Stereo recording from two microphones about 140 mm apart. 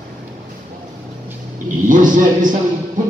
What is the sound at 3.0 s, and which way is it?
Music, 70° right (ahead or behind).